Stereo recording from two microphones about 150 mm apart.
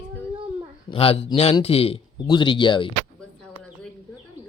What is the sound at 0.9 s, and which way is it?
Speech, 40° left (ahead or behind).